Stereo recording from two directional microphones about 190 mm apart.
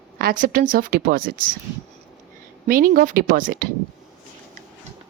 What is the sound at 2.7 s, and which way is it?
A woman's voice, 50° right (ahead or behind).